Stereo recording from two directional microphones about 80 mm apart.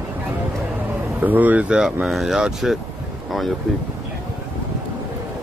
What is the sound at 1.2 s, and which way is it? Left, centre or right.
Speech, right.